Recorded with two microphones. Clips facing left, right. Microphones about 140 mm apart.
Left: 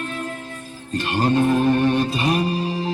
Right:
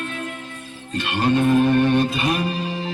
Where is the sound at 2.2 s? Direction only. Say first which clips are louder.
Left 2 dB; 35° left (ahead or behind).